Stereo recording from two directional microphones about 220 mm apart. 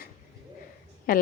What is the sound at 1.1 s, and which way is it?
Speech, 40° left (ahead or behind).